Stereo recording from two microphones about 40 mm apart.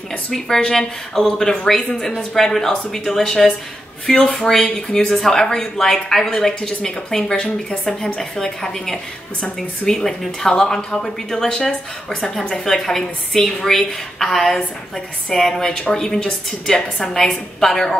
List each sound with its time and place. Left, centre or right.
0.5 s speech: centre
12.6 s speech: centre